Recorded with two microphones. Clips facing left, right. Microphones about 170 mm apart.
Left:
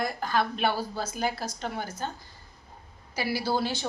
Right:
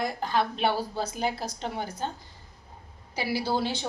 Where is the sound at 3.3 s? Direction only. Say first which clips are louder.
Right 1 dB; 5° left (ahead or behind).